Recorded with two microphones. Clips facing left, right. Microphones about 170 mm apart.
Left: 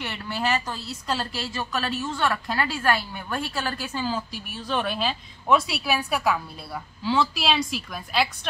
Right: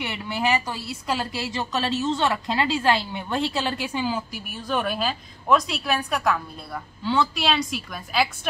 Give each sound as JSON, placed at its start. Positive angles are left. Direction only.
{"t": 0.0, "sound": "a woman's voice", "side_deg": -15}
{"t": 4.6, "sound": "a woman's voice", "side_deg": -5}